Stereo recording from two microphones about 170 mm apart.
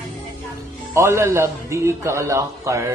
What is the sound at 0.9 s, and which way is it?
A man's voice, 15° right (ahead or behind).